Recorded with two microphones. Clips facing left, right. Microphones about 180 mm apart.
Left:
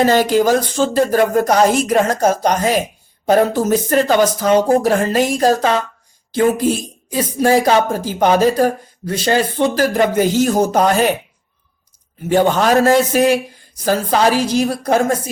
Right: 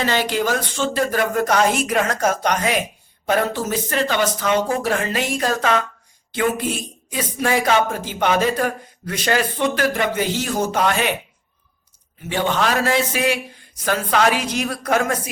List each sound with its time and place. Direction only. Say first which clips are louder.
0.0 s speech: left 8 dB; 45° left (ahead or behind)
12.3 s speech: left 7 dB; 45° left (ahead or behind)